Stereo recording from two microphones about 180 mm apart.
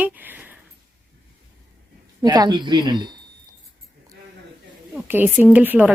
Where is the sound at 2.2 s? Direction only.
20° right (ahead or behind).